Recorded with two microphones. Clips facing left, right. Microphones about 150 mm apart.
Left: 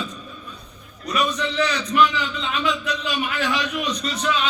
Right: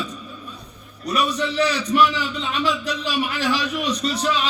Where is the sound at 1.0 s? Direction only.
35° right (ahead or behind).